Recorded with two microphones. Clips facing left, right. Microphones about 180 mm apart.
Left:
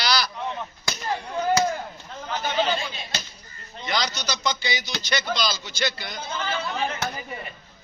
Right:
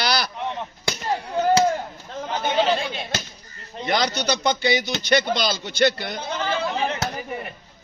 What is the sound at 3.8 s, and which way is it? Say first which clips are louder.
A man's voice: right 5 dB; 55° right (ahead or behind).